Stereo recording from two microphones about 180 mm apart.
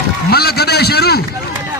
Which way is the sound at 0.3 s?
60° left (ahead or behind).